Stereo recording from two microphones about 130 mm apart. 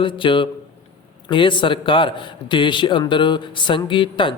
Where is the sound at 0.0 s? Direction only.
40° left (ahead or behind).